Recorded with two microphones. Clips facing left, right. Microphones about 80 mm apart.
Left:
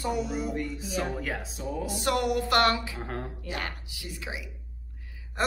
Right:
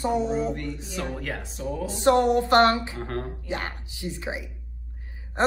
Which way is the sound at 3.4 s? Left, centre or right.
Right.